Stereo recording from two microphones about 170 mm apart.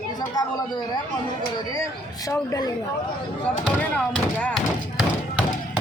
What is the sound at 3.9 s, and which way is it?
Speech, 10° left (ahead or behind).